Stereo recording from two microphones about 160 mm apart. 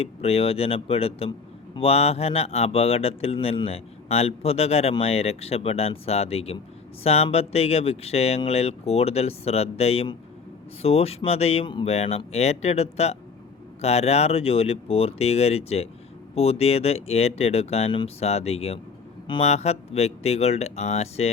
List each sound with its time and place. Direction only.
0.0 s a man's voice: 40° left (ahead or behind)